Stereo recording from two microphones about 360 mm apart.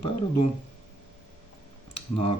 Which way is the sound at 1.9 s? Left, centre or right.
Centre.